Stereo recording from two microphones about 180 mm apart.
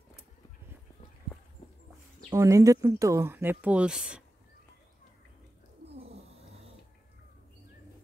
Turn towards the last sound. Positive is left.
turn(degrees=-35)  # may be behind; listen again after turning